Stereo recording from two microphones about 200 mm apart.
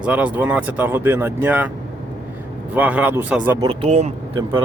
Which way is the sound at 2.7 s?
5° right (ahead or behind).